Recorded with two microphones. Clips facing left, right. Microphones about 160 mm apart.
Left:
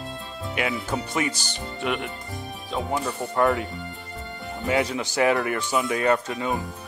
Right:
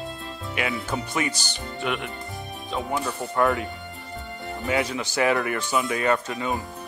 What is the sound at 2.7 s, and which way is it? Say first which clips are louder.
Speech: left 1 dB; 20° left (ahead or behind).